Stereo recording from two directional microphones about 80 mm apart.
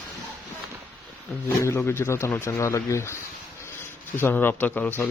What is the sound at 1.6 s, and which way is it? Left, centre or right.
Speech, left.